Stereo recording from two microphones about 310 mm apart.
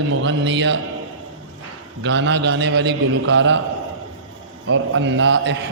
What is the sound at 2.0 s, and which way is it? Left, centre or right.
A man's voice, right.